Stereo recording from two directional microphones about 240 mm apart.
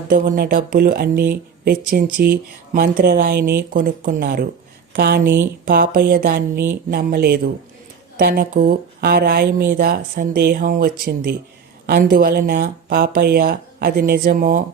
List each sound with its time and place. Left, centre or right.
0.1 s speech: right